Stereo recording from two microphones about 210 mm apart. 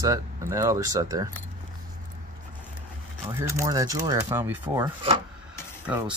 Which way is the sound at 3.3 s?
15° right (ahead or behind).